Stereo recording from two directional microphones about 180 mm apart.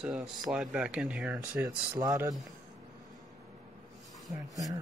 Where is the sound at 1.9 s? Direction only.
20° right (ahead or behind).